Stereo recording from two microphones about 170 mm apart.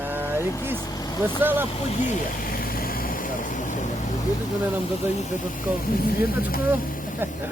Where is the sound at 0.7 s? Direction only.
25° left (ahead or behind).